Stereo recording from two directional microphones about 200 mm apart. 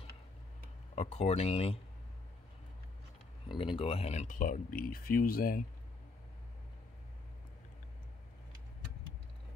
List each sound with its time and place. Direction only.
0.9 s speech: 35° left (ahead or behind)
3.4 s speech: 25° left (ahead or behind); by 5.6 s 45° left (ahead or behind)